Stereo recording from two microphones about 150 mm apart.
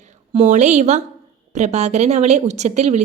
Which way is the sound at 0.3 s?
50° right (ahead or behind).